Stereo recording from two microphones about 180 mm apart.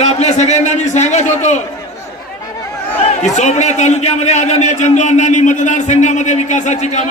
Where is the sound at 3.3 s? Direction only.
40° left (ahead or behind).